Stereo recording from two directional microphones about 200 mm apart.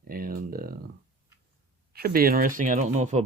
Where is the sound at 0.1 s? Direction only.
45° right (ahead or behind).